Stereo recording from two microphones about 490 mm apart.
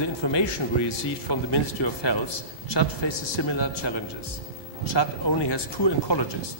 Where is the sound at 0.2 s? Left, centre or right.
Left.